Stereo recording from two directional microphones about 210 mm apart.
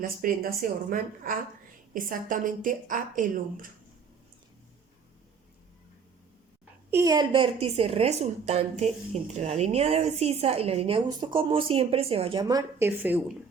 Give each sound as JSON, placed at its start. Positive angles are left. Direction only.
{"t": 0.0, "sound": "a woman's voice", "side_deg": -40}
{"t": 6.9, "sound": "a woman's voice", "side_deg": -15}